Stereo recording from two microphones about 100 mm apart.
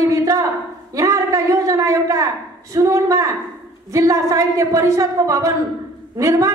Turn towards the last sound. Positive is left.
turn(degrees=-35)  # may be behind; listen again after turning